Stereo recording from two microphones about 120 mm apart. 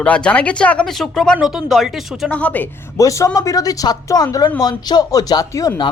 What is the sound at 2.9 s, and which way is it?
Speech, 25° left (ahead or behind).